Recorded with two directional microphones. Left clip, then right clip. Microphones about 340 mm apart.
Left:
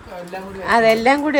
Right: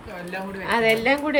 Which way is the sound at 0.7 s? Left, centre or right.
Centre.